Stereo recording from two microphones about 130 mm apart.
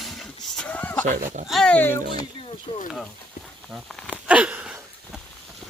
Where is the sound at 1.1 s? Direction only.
70° right (ahead or behind).